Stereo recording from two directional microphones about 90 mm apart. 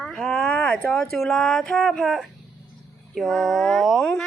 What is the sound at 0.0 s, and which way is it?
A child's voice, 5° left (ahead or behind).